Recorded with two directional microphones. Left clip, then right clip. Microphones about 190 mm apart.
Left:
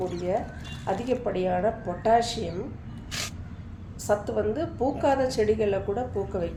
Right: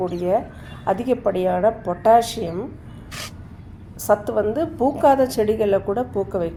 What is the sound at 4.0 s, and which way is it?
A woman's voice, 50° right (ahead or behind).